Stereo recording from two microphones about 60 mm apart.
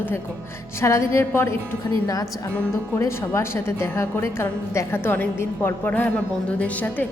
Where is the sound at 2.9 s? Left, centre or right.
Left.